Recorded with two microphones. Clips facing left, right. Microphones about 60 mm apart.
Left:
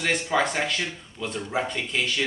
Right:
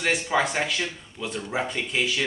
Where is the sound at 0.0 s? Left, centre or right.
Centre.